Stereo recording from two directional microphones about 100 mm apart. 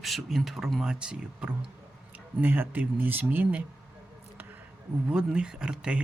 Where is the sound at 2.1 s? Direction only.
20° right (ahead or behind).